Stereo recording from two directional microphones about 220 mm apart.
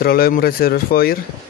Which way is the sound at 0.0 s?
40° left (ahead or behind).